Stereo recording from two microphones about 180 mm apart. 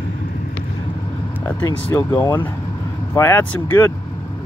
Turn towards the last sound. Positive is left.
turn(degrees=10)  # may be behind; listen again after turning